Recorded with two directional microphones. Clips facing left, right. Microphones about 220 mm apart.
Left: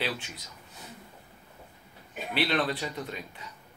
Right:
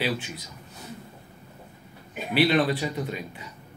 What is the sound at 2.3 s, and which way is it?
A man's voice, 5° right (ahead or behind).